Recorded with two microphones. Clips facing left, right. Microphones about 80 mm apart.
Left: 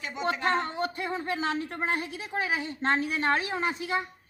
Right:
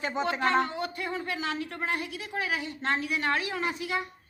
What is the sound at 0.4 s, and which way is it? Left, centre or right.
Speech, left.